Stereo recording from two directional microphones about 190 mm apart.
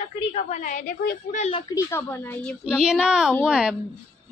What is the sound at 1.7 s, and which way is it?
Speech, 15° left (ahead or behind).